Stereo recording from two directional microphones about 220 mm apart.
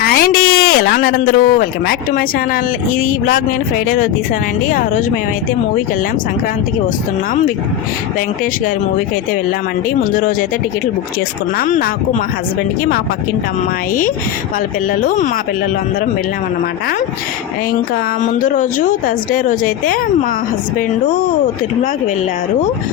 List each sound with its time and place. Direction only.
0.0 s speech: 40° left (ahead or behind)
10.0 s speech: 40° left (ahead or behind)
11.5 s speech: 40° left (ahead or behind)
15.0 s speech: 35° left (ahead or behind)
18.2 s speech: 35° left (ahead or behind)